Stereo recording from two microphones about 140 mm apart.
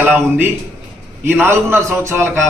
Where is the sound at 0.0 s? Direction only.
15° right (ahead or behind).